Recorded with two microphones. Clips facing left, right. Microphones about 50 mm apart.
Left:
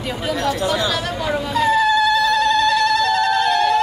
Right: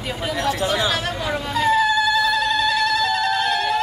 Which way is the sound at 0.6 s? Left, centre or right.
Right.